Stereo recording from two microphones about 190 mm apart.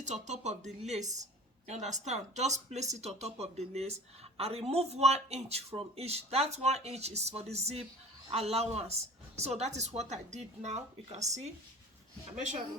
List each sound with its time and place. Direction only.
0.0 s speech: 40° right (ahead or behind)